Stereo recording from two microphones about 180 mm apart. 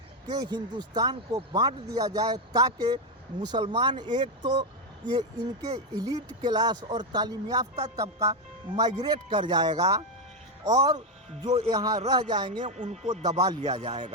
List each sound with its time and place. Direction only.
0.3 s speech: 25° right (ahead or behind)
10.9 s speech: 40° right (ahead or behind)
11.7 s speech: 20° right (ahead or behind)
12.6 s speech: 40° right (ahead or behind)